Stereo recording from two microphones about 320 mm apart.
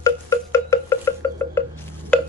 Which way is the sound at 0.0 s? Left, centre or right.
Centre.